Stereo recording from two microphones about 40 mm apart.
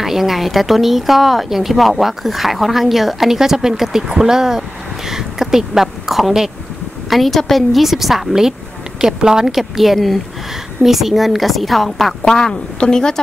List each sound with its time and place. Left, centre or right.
0.0 s speech: centre
12.3 s a woman's voice: centre